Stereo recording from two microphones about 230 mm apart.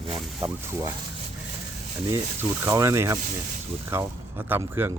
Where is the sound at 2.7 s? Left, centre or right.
Centre.